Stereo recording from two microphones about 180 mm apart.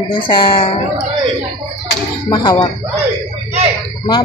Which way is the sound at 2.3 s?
25° left (ahead or behind).